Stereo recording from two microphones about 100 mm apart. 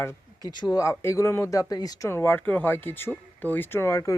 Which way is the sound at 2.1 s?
25° left (ahead or behind).